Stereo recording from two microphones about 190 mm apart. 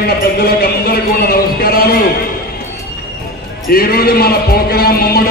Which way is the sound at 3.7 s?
55° left (ahead or behind).